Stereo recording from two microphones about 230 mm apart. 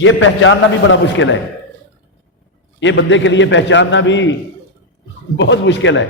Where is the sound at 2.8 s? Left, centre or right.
Left.